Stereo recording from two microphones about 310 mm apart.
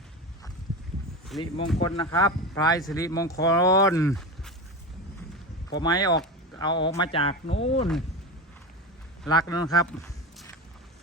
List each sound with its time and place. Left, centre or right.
1.3 s speech: centre
1.8 s speech: centre
5.7 s speech: centre
9.3 s speech: centre
9.7 s a sound: centre